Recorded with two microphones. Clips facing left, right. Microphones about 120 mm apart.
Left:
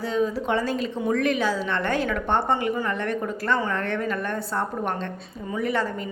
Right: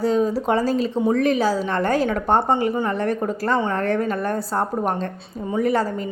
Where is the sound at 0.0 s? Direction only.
40° right (ahead or behind).